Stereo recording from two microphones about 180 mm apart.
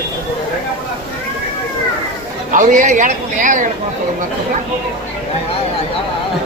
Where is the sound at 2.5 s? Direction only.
45° right (ahead or behind).